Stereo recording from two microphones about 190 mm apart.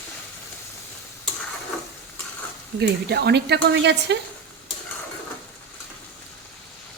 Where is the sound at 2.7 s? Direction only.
60° right (ahead or behind).